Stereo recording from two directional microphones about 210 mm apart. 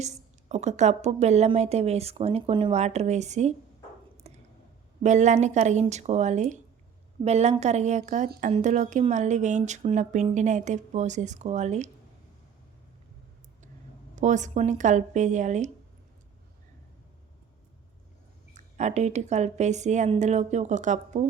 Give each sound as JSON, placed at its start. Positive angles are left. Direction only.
{"t": 0.0, "sound": "a woman's voice", "side_deg": -30}
{"t": 4.2, "sound": "a sound", "side_deg": -30}
{"t": 5.0, "sound": "a woman's voice", "side_deg": -35}
{"t": 14.2, "sound": "a woman's voice", "side_deg": -35}
{"t": 18.5, "sound": "a woman's voice", "side_deg": -35}